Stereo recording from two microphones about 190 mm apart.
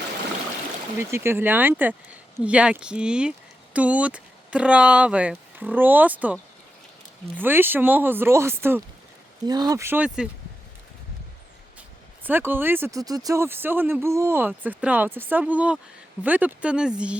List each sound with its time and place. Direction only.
0.9 s speech: 15° right (ahead or behind)
7.3 s speech: 10° right (ahead or behind)
12.2 s speech: 10° right (ahead or behind)